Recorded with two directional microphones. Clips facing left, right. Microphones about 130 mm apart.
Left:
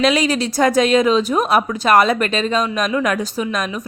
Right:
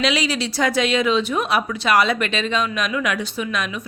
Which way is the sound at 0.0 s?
45° left (ahead or behind).